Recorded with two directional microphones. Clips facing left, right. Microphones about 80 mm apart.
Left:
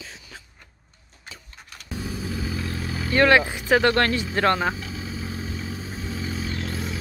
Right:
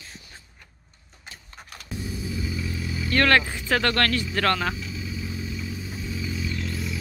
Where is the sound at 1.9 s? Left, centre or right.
Left.